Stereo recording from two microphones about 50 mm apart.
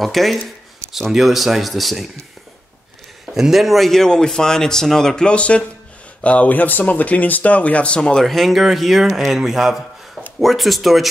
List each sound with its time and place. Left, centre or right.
0.0 s speech: centre
3.3 s speech: centre; by 8.2 s left
8.2 s speech: centre